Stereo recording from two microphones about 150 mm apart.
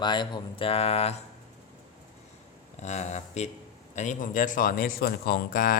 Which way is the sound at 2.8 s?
50° left (ahead or behind).